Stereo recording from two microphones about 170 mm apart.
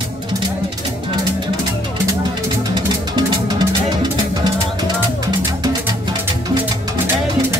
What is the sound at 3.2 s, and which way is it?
Music, 25° right (ahead or behind).